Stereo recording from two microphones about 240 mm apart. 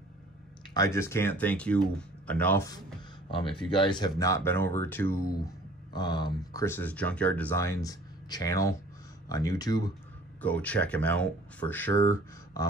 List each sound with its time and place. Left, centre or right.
0.7 s speech: centre
10.4 s speech: centre